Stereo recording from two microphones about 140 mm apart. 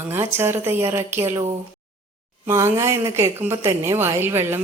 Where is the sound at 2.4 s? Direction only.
20° right (ahead or behind).